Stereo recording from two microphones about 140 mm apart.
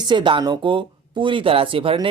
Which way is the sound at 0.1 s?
35° right (ahead or behind).